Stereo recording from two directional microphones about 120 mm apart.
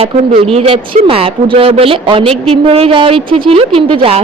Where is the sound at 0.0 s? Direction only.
55° right (ahead or behind).